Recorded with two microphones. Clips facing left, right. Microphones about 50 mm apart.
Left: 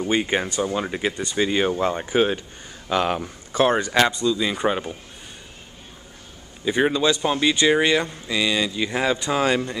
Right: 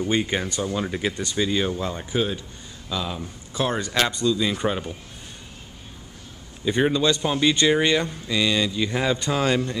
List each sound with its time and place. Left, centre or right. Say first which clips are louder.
0.0 s speech: left 2 dB; centre; by 2.4 s left
2.9 s speech: left 7 dB; left
3.6 s speech: left 5 dB; left
4.0 s speech: right 1 dB; centre
6.6 s speech: left 1 dB; centre